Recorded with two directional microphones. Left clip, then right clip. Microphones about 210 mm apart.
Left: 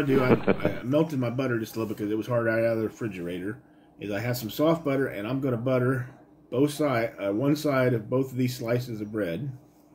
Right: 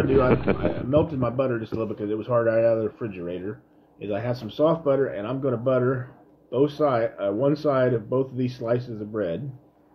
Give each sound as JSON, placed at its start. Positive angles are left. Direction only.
{"t": 0.1, "sound": "speech", "side_deg": 0}
{"t": 0.9, "sound": "speech", "side_deg": -25}